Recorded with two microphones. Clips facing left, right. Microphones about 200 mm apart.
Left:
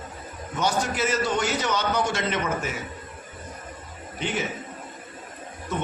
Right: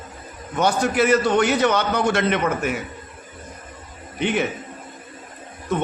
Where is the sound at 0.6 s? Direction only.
60° right (ahead or behind).